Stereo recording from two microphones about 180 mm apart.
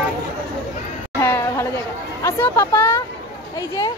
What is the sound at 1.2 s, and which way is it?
Speech, 15° left (ahead or behind).